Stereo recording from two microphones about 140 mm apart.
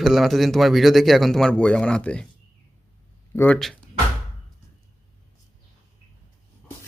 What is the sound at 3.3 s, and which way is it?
Speech, 15° left (ahead or behind).